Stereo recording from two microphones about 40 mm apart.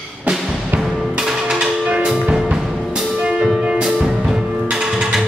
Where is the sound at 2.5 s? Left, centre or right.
Centre.